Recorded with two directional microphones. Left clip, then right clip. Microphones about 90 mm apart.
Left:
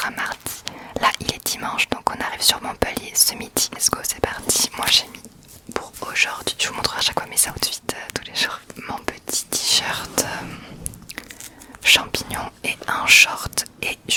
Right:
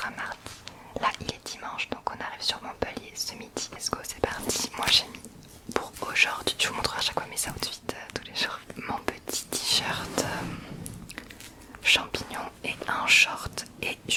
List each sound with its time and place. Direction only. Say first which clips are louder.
0.0 s speech: left 9 dB; 35° left (ahead or behind)
5.6 s whispering: left 2 dB; 10° left (ahead or behind)
6.0 s speech: left 4 dB; 20° left (ahead or behind)
8.8 s whispering: left 2 dB; 20° left (ahead or behind)
11.8 s whispering: left 7 dB; 25° left (ahead or behind)